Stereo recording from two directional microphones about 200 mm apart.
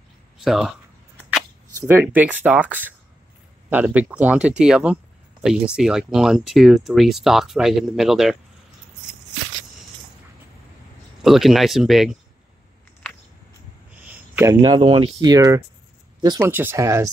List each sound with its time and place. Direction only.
0.4 s speech: centre (ahead or behind)
1.9 s speech: 10° right (ahead or behind)
11.2 s speech: centre (ahead or behind)
13.9 s a sound: 10° right (ahead or behind)
14.8 s speech: 25° right (ahead or behind)